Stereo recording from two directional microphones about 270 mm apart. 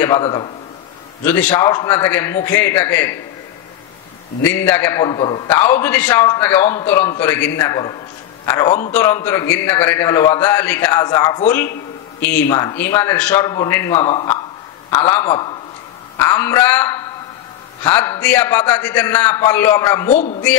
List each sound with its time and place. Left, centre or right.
0.0 s a man's voice: centre
4.4 s a man's voice: centre
20.1 s a man's voice: left